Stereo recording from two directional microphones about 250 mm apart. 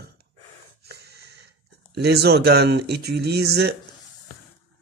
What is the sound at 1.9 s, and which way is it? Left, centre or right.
Speech, right.